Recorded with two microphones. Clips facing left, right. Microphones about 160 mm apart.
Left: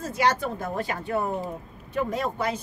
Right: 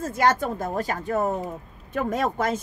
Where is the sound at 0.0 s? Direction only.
50° right (ahead or behind).